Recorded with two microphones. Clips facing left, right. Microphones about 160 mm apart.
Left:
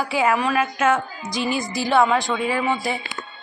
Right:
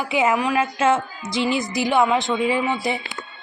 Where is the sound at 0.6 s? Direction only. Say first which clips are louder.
Right 1 dB; 25° right (ahead or behind).